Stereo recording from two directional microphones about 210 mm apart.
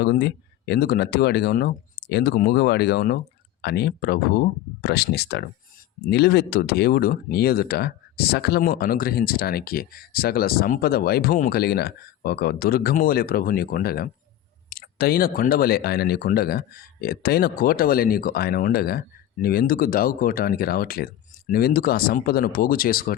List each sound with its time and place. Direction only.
0.0 s speech: 50° left (ahead or behind)